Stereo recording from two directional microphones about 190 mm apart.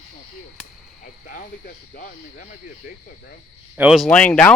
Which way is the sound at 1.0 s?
45° left (ahead or behind).